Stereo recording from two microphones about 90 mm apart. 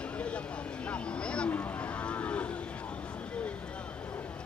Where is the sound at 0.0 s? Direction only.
15° left (ahead or behind).